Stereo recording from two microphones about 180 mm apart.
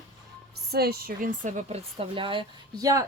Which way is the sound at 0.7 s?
60° right (ahead or behind).